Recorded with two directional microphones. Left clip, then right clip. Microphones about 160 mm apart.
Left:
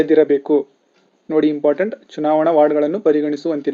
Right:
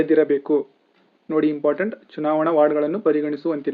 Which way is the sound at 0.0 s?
30° left (ahead or behind).